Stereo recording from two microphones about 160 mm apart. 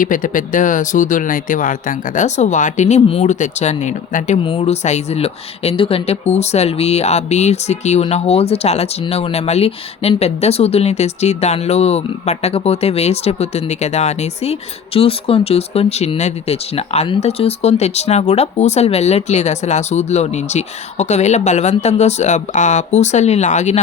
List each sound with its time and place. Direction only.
0.0 s speech: 55° left (ahead or behind)